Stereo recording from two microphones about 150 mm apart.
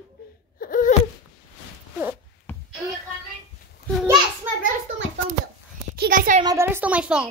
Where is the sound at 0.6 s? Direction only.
65° left (ahead or behind).